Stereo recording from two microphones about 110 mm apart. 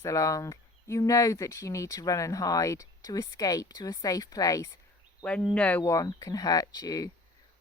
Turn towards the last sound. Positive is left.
turn(degrees=35)  # may be behind; listen again after turning